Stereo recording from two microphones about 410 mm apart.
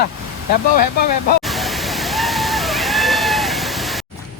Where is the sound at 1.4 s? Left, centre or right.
Centre.